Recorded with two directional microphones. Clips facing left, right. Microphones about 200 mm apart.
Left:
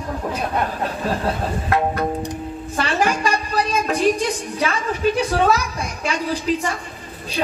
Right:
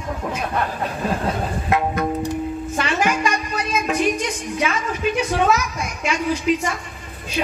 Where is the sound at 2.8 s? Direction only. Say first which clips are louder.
Left 1 dB; 35° left (ahead or behind).